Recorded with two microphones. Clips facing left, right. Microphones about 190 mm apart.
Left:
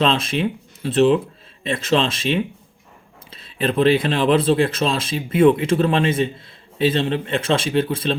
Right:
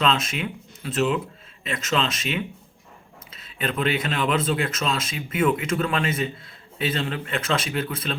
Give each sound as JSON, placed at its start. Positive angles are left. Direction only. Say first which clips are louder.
{"t": 0.0, "sound": "speech", "louder": "left 5 dB", "side_deg": 30}